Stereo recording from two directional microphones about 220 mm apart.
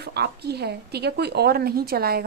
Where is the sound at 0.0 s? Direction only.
50° right (ahead or behind).